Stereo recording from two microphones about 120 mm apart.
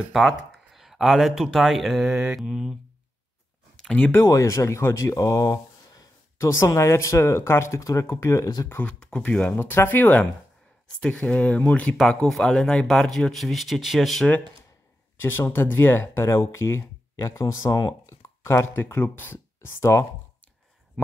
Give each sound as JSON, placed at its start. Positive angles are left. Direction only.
{"t": 0.1, "sound": "speech", "side_deg": 0}
{"t": 3.7, "sound": "speech", "side_deg": 10}
{"t": 8.6, "sound": "speech", "side_deg": 15}
{"t": 15.1, "sound": "speech", "side_deg": 20}